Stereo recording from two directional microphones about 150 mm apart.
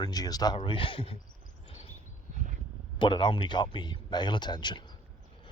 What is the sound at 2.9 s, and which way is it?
Speech, 35° left (ahead or behind).